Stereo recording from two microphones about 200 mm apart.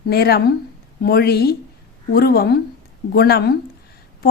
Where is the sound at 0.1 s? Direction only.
50° left (ahead or behind).